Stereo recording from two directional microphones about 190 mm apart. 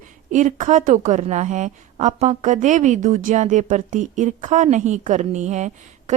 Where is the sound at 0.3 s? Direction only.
40° right (ahead or behind).